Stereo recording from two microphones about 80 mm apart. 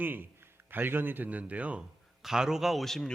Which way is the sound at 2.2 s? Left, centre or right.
Centre.